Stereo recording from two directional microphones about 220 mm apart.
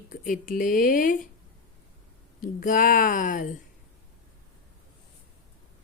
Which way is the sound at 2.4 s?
35° left (ahead or behind).